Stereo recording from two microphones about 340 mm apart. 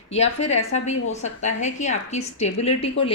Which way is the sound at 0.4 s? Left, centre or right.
Centre.